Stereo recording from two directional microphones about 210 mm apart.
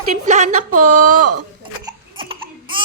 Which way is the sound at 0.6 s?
90° right.